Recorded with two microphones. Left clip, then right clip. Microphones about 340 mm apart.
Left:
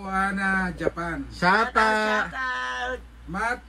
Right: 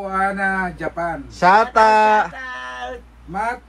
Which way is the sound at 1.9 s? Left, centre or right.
Right.